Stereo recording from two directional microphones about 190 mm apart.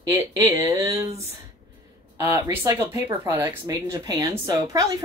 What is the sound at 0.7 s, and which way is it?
Speech, 15° right (ahead or behind).